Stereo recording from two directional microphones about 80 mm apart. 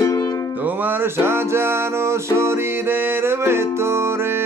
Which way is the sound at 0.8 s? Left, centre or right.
Right.